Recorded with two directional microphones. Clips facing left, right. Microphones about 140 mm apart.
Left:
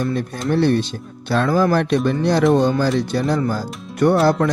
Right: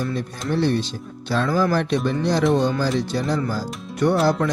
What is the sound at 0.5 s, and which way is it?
Speech, 60° left (ahead or behind).